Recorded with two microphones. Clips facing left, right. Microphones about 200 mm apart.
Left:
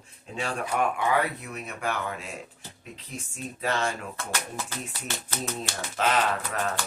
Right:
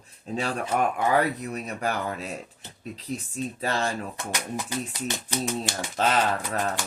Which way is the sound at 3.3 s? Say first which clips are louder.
Even; 35° right (ahead or behind).